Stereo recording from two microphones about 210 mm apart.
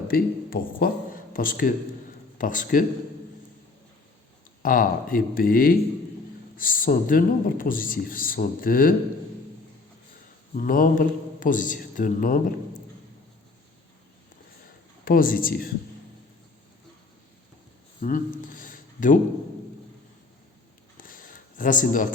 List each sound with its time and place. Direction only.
0.1 s speech: 45° left (ahead or behind)
4.6 s speech: 40° left (ahead or behind)
10.5 s speech: 40° left (ahead or behind)
15.0 s speech: 40° left (ahead or behind)
18.0 s a sound: 40° left (ahead or behind)
21.0 s a sound: 40° left (ahead or behind)